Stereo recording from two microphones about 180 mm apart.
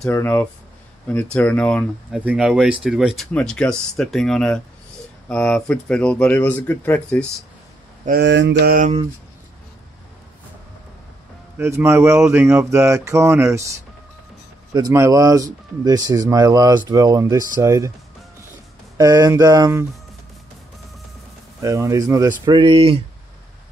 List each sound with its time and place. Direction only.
0.0 s speech: 10° left (ahead or behind)
2.1 s speech: 5° right (ahead or behind)
8.2 s mantra: 75° right (ahead or behind)
11.5 s speech: 15° right (ahead or behind)
18.9 s speech: 20° right (ahead or behind)
21.6 s speech: 15° right (ahead or behind)